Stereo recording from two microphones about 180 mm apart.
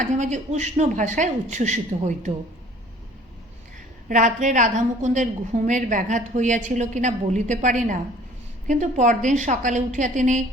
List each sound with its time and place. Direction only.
0.0 s speech: 40° right (ahead or behind)
4.1 s a woman's voice: 45° right (ahead or behind)